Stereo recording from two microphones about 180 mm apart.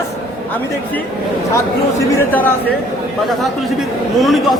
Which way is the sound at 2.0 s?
10° left (ahead or behind).